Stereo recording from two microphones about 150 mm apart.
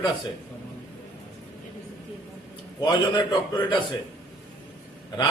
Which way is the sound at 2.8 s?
30° left (ahead or behind).